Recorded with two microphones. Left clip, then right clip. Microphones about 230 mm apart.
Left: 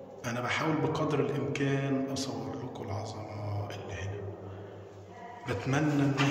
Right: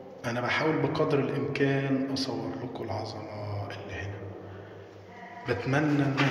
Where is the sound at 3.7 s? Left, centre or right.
Centre.